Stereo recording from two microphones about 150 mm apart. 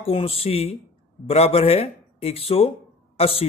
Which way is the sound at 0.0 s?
40° left (ahead or behind).